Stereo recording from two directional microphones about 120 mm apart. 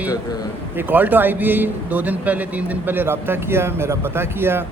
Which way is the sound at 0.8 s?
15° right (ahead or behind).